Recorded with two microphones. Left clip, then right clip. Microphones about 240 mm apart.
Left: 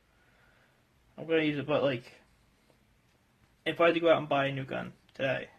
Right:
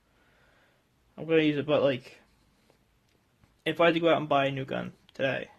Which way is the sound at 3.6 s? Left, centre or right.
Right.